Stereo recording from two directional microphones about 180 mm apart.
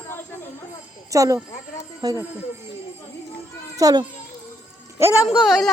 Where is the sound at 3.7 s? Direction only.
20° right (ahead or behind).